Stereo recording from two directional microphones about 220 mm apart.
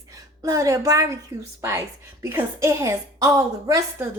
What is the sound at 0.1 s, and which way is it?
A woman's voice, 15° right (ahead or behind).